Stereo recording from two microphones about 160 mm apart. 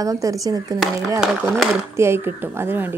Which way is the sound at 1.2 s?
Centre (ahead or behind).